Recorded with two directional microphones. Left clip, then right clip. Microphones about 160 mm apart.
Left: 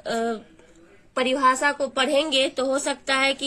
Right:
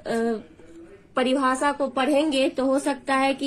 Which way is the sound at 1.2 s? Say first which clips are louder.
Even; 20° left (ahead or behind).